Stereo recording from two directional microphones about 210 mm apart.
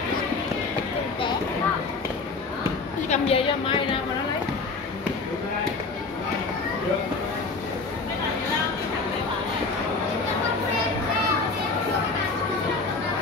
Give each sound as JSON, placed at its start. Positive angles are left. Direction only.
{"t": 3.1, "sound": "a woman's voice", "side_deg": 30}